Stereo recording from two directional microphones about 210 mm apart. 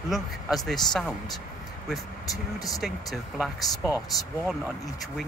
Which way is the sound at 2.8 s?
Centre (ahead or behind).